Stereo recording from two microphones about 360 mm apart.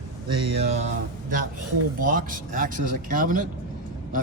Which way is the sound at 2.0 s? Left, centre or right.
Right.